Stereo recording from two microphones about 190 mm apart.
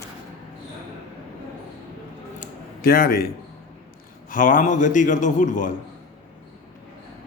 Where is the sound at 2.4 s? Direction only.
50° left (ahead or behind).